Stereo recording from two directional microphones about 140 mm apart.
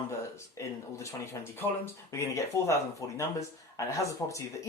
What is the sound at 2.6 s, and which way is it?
Speech, 20° left (ahead or behind).